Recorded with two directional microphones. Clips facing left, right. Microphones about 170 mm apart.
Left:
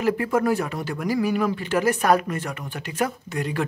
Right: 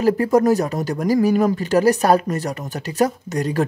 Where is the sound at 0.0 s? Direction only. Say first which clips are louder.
Right 6 dB; 40° right (ahead or behind).